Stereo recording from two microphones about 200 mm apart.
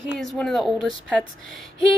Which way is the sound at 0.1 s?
Centre (ahead or behind).